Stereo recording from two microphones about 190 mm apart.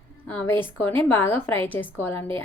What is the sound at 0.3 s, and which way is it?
A woman's voice, 5° left (ahead or behind).